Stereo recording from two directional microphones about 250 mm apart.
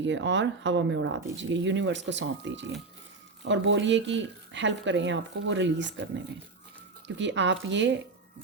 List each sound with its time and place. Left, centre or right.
0.0 s speech: right
7.2 s speech: right